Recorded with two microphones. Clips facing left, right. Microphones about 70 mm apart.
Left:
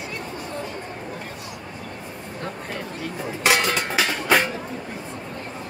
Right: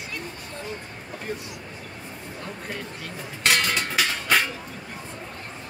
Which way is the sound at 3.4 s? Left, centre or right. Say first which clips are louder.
Left 3 dB; centre.